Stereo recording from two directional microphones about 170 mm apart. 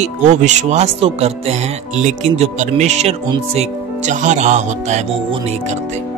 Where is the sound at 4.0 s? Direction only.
45° right (ahead or behind).